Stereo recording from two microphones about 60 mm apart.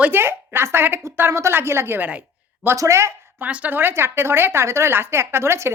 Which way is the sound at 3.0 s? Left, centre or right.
Right.